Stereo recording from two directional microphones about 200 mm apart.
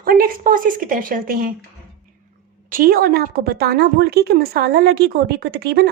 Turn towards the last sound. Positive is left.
turn(degrees=-55)  # may be behind; listen again after turning